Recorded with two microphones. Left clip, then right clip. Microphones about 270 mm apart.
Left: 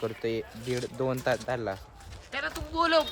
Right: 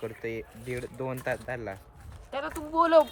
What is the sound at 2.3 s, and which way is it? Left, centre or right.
Speech, centre.